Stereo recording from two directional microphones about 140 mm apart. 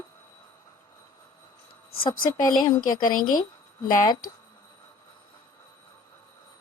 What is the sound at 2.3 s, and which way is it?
Speech, 30° left (ahead or behind).